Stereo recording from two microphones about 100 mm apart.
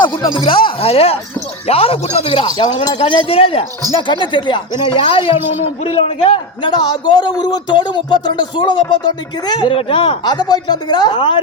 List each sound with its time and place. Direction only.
0.0 s speech: 50° left (ahead or behind); by 2.5 s 65° left (ahead or behind)
2.5 s speech: 45° left (ahead or behind); by 3.7 s 65° left (ahead or behind)
3.9 s speech: 50° left (ahead or behind)
9.7 s speech: 65° left (ahead or behind)